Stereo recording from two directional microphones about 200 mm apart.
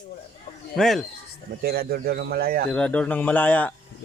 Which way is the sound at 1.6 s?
50° right (ahead or behind).